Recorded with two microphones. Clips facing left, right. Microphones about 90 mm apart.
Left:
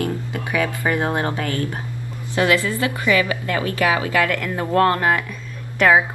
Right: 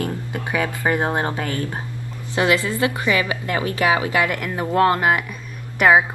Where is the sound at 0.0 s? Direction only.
25° right (ahead or behind).